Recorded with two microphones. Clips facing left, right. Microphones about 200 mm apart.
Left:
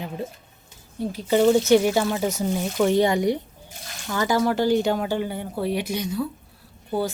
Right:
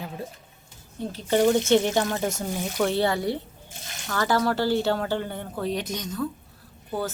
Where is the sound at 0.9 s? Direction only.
10° left (ahead or behind).